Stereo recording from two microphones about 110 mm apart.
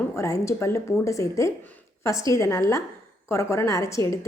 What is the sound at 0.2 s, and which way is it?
A woman's voice, 25° left (ahead or behind).